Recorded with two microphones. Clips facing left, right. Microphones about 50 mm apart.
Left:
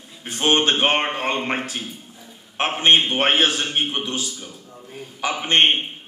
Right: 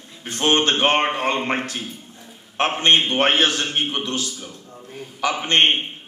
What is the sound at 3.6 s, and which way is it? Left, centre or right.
Speech, centre.